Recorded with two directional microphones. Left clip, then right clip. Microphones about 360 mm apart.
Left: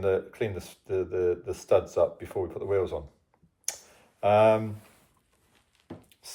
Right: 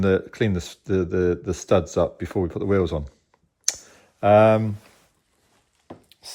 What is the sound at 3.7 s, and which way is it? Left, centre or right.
Clicking, right.